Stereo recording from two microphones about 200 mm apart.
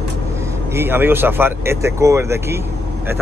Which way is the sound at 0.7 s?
10° right (ahead or behind).